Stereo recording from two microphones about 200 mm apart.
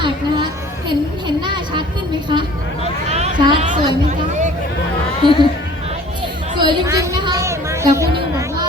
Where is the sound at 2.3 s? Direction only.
25° right (ahead or behind).